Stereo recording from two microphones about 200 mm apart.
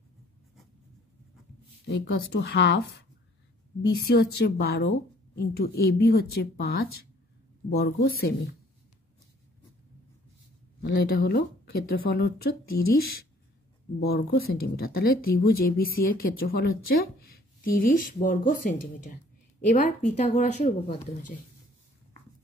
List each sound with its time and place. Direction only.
1.9 s speech: 60° left (ahead or behind)
4.1 s speech: 55° left (ahead or behind)
11.1 s speech: 55° left (ahead or behind); by 21.0 s 35° left (ahead or behind)